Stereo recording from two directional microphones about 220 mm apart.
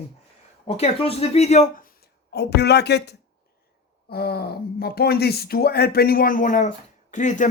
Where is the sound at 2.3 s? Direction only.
50° left (ahead or behind).